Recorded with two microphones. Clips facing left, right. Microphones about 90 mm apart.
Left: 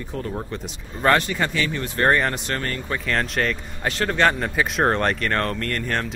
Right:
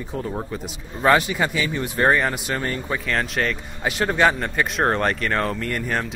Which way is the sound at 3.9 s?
15° right (ahead or behind).